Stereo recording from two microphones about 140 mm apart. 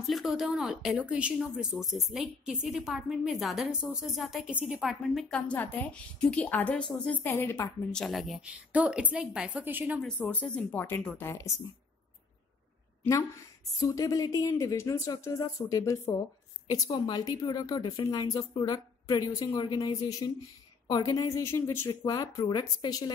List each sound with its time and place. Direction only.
0.0 s speech: centre (ahead or behind)
5.0 s a woman's voice: 5° left (ahead or behind)
7.9 s a woman's voice: centre (ahead or behind)
10.0 s a woman's voice: 15° left (ahead or behind)
13.7 s a woman's voice: 25° left (ahead or behind)